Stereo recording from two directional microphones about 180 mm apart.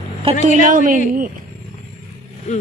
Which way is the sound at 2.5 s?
40° left (ahead or behind).